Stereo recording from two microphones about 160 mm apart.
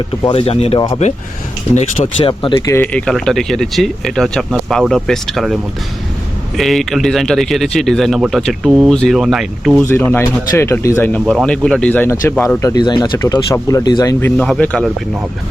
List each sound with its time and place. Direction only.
0.3 s speech: 35° left (ahead or behind)
2.6 s speech: 10° left (ahead or behind)
6.6 s speech: centre (ahead or behind)
9.8 s speech: 15° left (ahead or behind)
12.6 s speech: 25° left (ahead or behind)
14.3 s speech: 5° left (ahead or behind)